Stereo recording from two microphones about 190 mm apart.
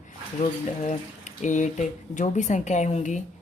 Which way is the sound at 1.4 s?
40° left (ahead or behind).